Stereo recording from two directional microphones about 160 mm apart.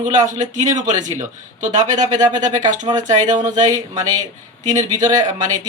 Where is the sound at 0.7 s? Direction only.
25° right (ahead or behind).